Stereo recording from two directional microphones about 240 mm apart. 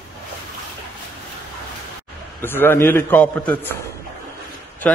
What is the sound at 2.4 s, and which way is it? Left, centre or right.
A man's voice, centre.